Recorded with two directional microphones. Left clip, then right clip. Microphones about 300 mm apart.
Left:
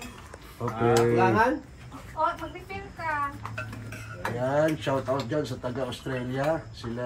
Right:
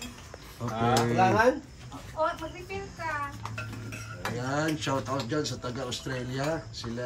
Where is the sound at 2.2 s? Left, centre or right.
Centre.